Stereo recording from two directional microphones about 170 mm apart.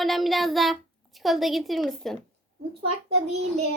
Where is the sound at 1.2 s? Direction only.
Centre (ahead or behind).